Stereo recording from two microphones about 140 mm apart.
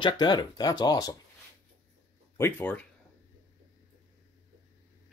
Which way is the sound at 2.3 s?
15° left (ahead or behind).